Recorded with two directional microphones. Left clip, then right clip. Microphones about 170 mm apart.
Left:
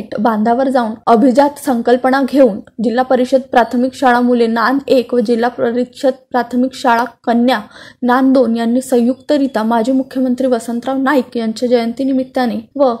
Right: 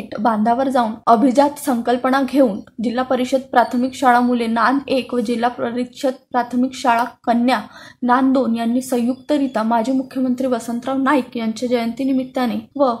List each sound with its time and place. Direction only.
0.1 s a woman's voice: 25° left (ahead or behind)